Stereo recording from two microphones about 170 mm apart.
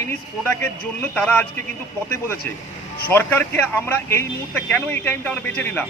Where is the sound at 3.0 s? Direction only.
10° left (ahead or behind).